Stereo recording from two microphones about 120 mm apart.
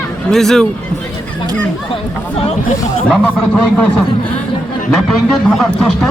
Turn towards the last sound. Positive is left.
turn(degrees=5)  # may be behind; listen again after turning